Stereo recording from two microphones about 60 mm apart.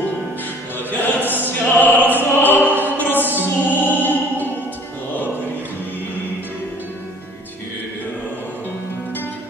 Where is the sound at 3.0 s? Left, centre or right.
Left.